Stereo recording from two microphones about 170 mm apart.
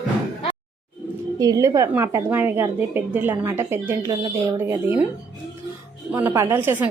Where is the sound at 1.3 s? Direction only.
20° right (ahead or behind).